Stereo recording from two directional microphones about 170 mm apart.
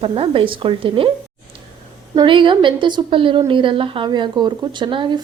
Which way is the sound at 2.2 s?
30° right (ahead or behind).